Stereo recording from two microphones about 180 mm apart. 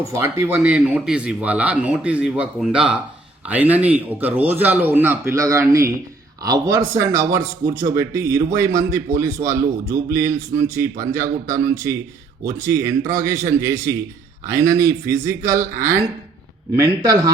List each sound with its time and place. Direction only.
0.1 s a man's voice: 15° right (ahead or behind)